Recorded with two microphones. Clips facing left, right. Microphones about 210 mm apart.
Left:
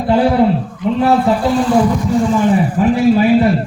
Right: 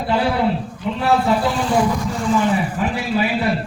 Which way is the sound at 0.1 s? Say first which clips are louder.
Left 7 dB; 45° left (ahead or behind).